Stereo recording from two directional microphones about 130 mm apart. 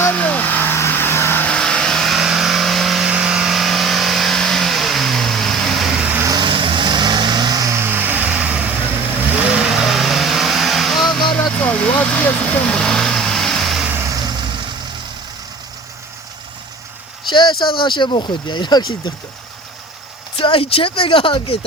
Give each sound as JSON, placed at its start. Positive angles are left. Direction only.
{"t": 0.0, "sound": "vehicle", "side_deg": 10}
{"t": 6.2, "sound": "vehicle", "side_deg": -35}
{"t": 11.6, "sound": "vehicle", "side_deg": 10}
{"t": 13.8, "sound": "vehicle", "side_deg": -20}
{"t": 17.2, "sound": "speech", "side_deg": 35}
{"t": 20.4, "sound": "speech", "side_deg": 45}